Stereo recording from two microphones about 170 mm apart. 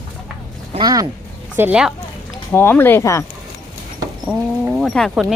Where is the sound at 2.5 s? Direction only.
10° left (ahead or behind).